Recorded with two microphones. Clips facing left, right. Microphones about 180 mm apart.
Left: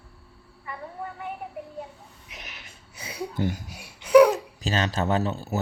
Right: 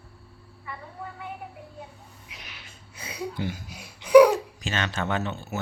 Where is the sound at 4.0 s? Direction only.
5° left (ahead or behind).